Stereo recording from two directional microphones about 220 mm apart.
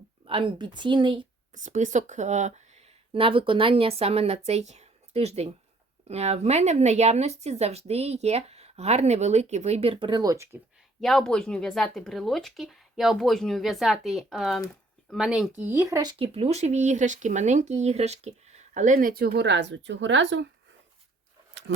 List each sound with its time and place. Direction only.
0.3 s speech: 25° right (ahead or behind)
1.5 s speech: 35° right (ahead or behind); by 10.6 s 15° right (ahead or behind)
11.0 s speech: centre (ahead or behind); by 20.5 s 55° right (ahead or behind)